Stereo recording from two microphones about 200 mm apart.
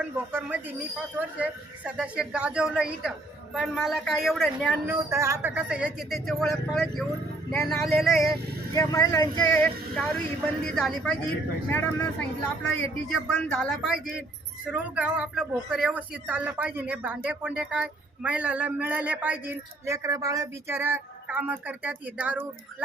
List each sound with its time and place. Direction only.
0.0 s a woman's voice: 10° right (ahead or behind)
5.0 s a woman's voice: 15° right (ahead or behind)
8.7 s speech: 15° left (ahead or behind)
9.5 s a woman's voice: 5° left (ahead or behind)